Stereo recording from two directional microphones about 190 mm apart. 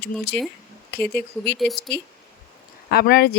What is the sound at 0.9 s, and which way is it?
Speech, 10° left (ahead or behind).